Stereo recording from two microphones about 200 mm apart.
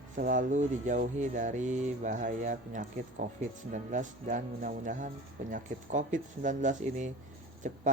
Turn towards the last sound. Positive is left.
turn(degrees=-40)  # may be behind; listen again after turning